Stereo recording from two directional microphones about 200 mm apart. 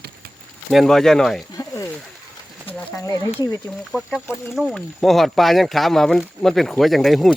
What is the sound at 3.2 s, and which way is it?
Speech, 15° left (ahead or behind).